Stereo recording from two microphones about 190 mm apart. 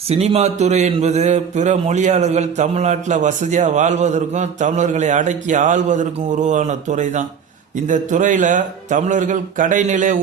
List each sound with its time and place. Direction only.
0.1 s a man's voice: 35° right (ahead or behind)